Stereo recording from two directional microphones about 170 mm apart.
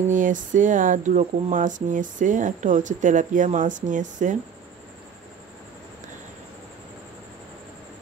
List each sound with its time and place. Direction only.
0.1 s speech: 50° right (ahead or behind)